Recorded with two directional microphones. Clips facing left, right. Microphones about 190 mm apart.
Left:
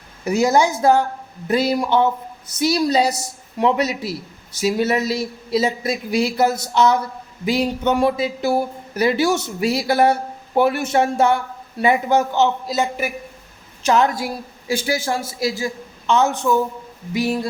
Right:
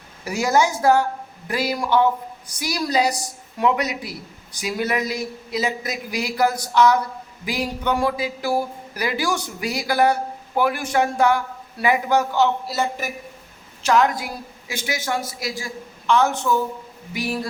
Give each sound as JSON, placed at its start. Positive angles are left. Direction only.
{"t": 0.3, "sound": "a man's voice", "side_deg": 25}
{"t": 13.8, "sound": "a man's voice", "side_deg": 25}